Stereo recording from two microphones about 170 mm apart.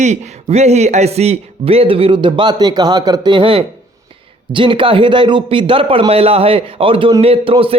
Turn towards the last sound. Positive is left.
turn(degrees=-30)  # may be behind; listen again after turning